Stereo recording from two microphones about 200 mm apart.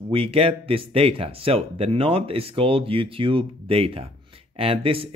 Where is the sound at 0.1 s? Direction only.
30° right (ahead or behind).